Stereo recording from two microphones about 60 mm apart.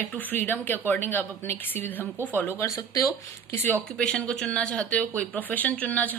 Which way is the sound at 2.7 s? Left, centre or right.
Left.